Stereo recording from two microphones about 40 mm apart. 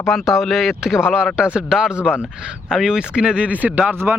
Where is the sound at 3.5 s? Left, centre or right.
Right.